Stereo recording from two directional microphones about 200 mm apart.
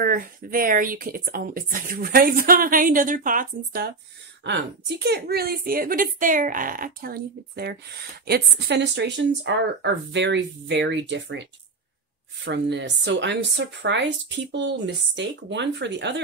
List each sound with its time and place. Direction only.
0.0 s speech: 45° right (ahead or behind)
4.4 s speech: 60° right (ahead or behind)
12.4 s speech: 60° right (ahead or behind)